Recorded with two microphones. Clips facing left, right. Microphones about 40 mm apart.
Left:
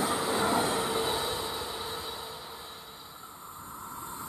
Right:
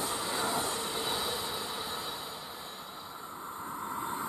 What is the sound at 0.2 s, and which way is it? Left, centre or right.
Train, centre.